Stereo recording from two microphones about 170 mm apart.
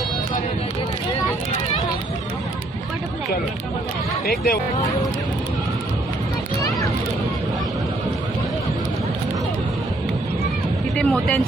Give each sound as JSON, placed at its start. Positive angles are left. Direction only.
{"t": 4.3, "sound": "speech", "side_deg": 65}
{"t": 10.9, "sound": "speech", "side_deg": 5}